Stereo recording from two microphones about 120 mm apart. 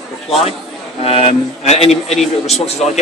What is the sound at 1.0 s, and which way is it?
Speech, 60° left (ahead or behind).